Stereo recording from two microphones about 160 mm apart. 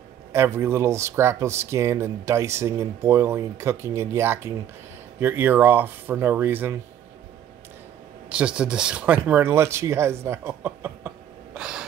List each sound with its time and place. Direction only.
0.3 s speech: 15° right (ahead or behind)
8.3 s speech: 5° right (ahead or behind)